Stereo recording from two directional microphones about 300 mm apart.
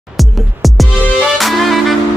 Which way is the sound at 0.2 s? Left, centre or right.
Centre.